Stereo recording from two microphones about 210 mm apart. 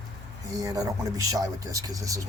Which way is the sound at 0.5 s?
15° right (ahead or behind).